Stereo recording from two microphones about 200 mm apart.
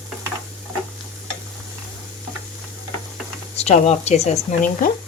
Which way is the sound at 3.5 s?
35° left (ahead or behind).